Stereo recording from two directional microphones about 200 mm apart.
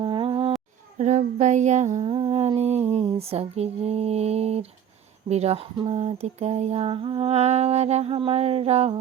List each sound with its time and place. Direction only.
0.0 s humming: 25° right (ahead or behind)
0.9 s lullaby: 35° right (ahead or behind)